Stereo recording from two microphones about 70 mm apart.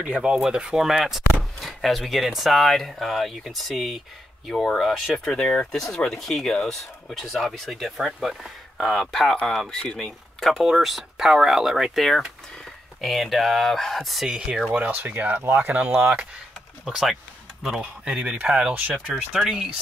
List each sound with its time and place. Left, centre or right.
0.0 s speech: centre
5.2 s speech: centre
14.3 s speech: centre
14.9 s speech: right
16.8 s speech: centre
18.0 s speech: centre